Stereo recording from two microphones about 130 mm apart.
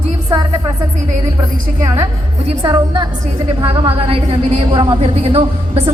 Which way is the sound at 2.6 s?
40° right (ahead or behind).